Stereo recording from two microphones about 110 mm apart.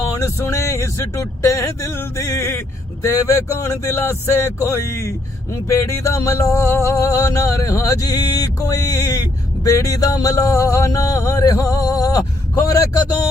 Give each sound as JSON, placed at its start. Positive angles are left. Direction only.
{"t": 0.1, "sound": "speech", "side_deg": 30}
{"t": 5.6, "sound": "music", "side_deg": 25}